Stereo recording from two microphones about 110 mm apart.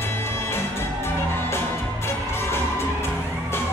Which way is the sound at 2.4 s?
20° left (ahead or behind).